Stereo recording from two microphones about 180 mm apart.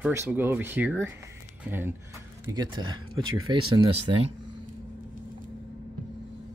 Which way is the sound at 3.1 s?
90° right.